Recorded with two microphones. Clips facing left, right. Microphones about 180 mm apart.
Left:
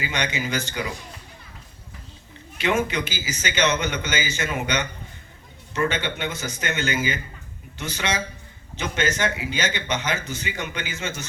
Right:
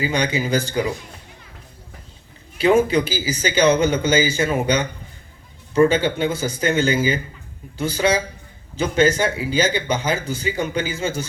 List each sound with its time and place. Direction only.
0.0 s speech: 35° right (ahead or behind)
2.6 s speech: 35° right (ahead or behind)